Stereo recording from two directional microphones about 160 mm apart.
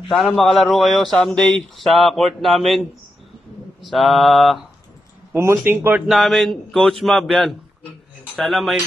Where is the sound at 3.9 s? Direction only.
Centre (ahead or behind).